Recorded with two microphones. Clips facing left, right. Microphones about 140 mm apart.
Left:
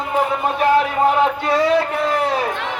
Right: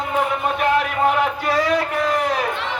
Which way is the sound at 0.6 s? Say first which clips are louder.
Left 4 dB; 30° left (ahead or behind).